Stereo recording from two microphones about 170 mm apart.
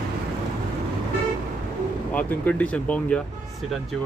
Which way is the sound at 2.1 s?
10° left (ahead or behind).